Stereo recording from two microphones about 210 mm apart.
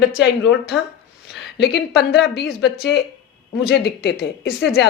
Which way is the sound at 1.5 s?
55° left (ahead or behind).